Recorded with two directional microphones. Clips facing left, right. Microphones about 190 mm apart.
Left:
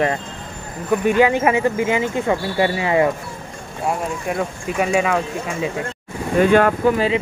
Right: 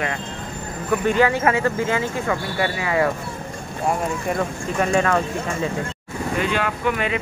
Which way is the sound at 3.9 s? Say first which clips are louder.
Even; 5° left (ahead or behind).